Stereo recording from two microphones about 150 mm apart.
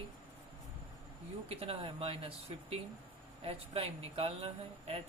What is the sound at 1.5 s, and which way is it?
Speech, 40° right (ahead or behind).